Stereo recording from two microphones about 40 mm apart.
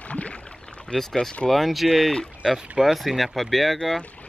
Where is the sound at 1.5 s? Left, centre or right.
Centre.